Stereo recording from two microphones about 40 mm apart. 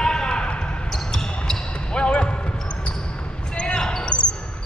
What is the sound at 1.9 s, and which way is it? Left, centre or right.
Basketball bounce, left.